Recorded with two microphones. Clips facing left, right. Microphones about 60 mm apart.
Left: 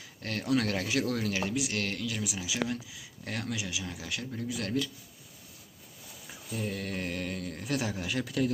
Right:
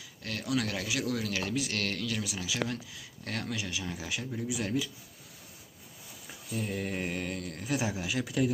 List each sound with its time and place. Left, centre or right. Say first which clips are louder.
0.2 s speech: left 3 dB; left
1.5 s speech: even; centre
6.2 s a sound: even; centre
6.7 s mantra: right 1 dB; centre
7.8 s speech: right 1 dB; centre